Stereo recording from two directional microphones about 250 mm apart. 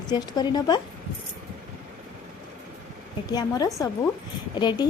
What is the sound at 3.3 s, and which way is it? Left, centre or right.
A woman's voice, centre.